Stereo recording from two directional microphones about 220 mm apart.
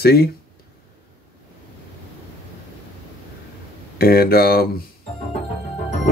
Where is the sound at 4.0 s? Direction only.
45° left (ahead or behind).